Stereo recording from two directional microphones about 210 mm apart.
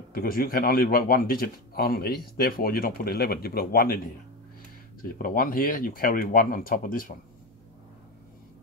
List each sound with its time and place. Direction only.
0.1 s speech: 45° left (ahead or behind)
5.0 s speech: 40° left (ahead or behind)